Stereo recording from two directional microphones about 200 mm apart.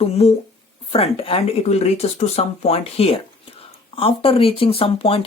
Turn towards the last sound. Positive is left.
turn(degrees=30)  # may be behind; listen again after turning